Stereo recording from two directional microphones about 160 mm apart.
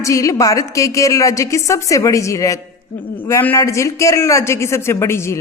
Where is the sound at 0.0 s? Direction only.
20° left (ahead or behind).